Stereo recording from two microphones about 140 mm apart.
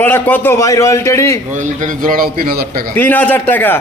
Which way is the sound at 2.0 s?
90° right.